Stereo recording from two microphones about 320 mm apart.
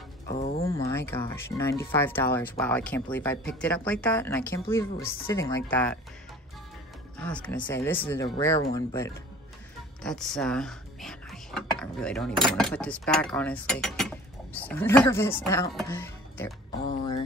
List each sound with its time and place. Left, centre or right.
0.3 s a sound: left
0.7 s speech: centre
7.2 s speech: centre